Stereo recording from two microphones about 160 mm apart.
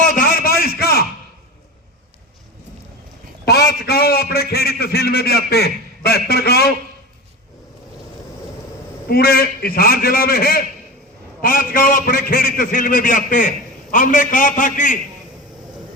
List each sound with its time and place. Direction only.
0.1 s a sound: 65° left (ahead or behind)
3.4 s a man's voice: 85° left
9.0 s a man's voice: 70° left (ahead or behind); by 14.9 s 55° left (ahead or behind)